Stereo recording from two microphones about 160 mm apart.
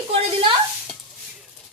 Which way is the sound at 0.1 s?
35° right (ahead or behind).